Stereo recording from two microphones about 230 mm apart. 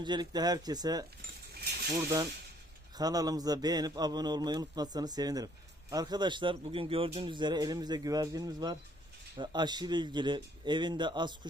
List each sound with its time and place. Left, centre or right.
0.0 s a man's voice: centre
1.5 s coin: right
3.0 s a man's voice: centre